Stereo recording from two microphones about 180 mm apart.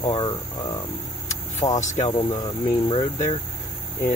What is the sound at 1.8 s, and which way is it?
Speech, 45° left (ahead or behind).